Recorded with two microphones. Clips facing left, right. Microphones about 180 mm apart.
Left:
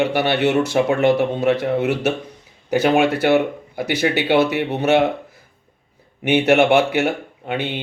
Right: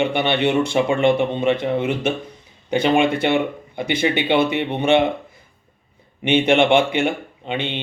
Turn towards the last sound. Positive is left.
turn(degrees=5)  # may be behind; listen again after turning